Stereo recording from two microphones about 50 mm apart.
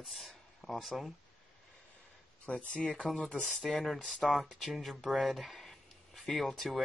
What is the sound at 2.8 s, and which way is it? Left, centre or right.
Speech, centre.